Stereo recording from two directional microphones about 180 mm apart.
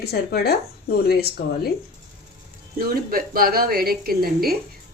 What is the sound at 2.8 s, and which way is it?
A woman's voice, 55° right (ahead or behind).